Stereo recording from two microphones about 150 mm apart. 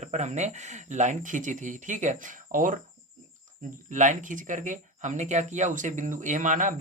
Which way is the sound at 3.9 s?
55° right (ahead or behind).